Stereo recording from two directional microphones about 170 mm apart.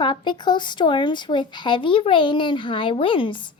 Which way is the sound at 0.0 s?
30° left (ahead or behind).